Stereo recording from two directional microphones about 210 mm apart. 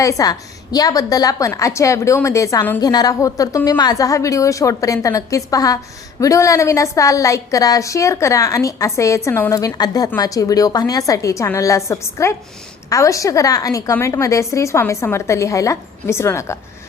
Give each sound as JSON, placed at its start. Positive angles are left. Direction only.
{"t": 0.0, "sound": "a woman's voice", "side_deg": 15}